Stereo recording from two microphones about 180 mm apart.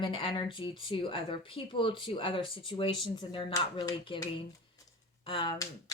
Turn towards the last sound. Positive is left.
turn(degrees=25)  # may be behind; listen again after turning